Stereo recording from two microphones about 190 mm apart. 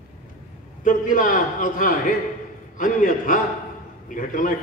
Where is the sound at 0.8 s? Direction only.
45° left (ahead or behind).